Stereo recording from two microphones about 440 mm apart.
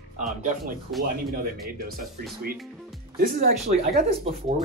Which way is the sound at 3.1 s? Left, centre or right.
Centre.